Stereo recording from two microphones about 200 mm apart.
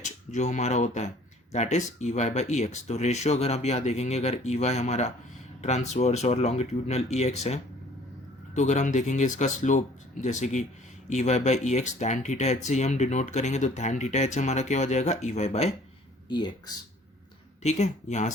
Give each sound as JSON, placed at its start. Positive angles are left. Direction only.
{"t": 0.0, "sound": "speech", "side_deg": 35}
{"t": 16.3, "sound": "speech", "side_deg": 20}
{"t": 17.6, "sound": "speech", "side_deg": 35}